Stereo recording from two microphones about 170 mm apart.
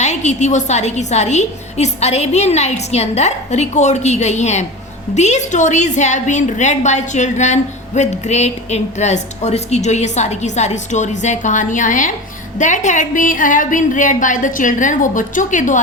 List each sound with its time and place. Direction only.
0.0 s a woman's voice: 45° left (ahead or behind)